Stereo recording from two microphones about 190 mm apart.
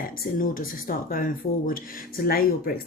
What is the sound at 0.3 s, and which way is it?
Speech, 45° left (ahead or behind).